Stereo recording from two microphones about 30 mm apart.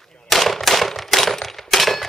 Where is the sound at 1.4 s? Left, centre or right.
Centre.